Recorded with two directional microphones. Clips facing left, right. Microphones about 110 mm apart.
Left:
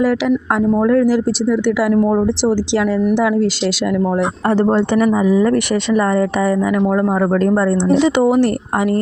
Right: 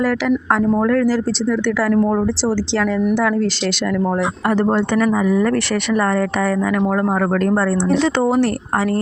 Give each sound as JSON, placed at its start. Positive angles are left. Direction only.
{"t": 0.0, "sound": "speech", "side_deg": 10}
{"t": 4.4, "sound": "speech", "side_deg": 30}
{"t": 4.9, "sound": "speech", "side_deg": 15}